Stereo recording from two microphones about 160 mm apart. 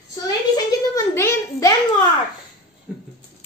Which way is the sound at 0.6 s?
20° left (ahead or behind).